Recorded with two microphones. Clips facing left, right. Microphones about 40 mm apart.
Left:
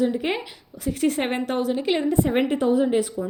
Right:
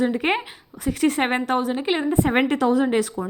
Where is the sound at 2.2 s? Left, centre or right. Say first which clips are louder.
Right 4 dB; right.